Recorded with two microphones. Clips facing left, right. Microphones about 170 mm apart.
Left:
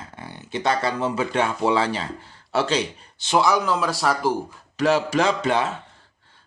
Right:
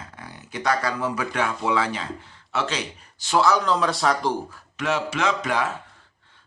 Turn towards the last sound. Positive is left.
turn(degrees=25)  # may be behind; listen again after turning